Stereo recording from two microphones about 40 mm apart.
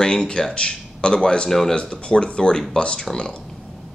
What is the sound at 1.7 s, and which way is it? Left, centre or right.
Speech, left.